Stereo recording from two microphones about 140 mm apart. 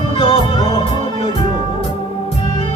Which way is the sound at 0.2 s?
40° left (ahead or behind).